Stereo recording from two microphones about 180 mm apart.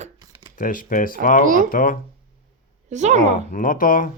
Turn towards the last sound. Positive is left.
turn(degrees=50)  # may be behind; listen again after turning